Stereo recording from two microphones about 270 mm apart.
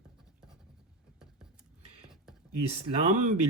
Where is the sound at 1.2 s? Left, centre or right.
Centre.